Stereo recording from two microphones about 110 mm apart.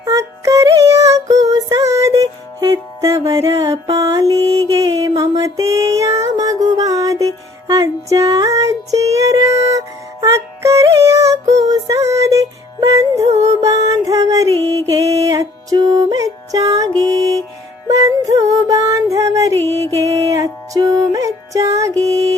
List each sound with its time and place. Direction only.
0.0 s female singing: 30° right (ahead or behind)
3.9 s mantra: 30° right (ahead or behind)
4.8 s a sound: 30° right (ahead or behind)
7.7 s music: 30° right (ahead or behind)